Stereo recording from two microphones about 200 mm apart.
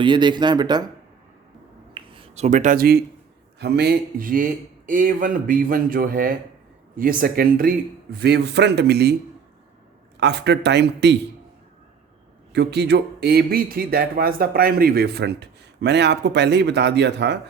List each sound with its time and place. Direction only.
0.0 s speech: 25° right (ahead or behind)
1.9 s a sound: 25° right (ahead or behind); by 3.0 s 50° right (ahead or behind)
3.6 s speech: 55° right (ahead or behind)
8.2 s speech: 55° right (ahead or behind)
10.2 s speech: 60° right (ahead or behind)
12.5 s speech: 55° right (ahead or behind)